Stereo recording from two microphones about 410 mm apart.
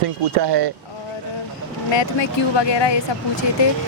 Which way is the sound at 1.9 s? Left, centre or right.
Left.